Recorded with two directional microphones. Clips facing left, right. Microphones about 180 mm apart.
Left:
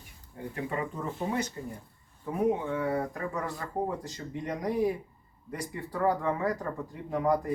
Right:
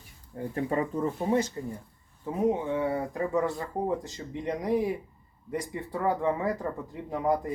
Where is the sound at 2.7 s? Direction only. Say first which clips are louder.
Right 2 dB; 25° right (ahead or behind).